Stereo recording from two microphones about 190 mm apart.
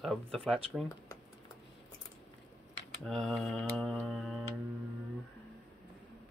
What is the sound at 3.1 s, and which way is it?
Speech, 5° left (ahead or behind).